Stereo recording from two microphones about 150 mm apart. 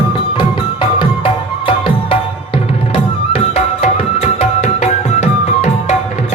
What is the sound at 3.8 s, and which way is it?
Music, 45° left (ahead or behind).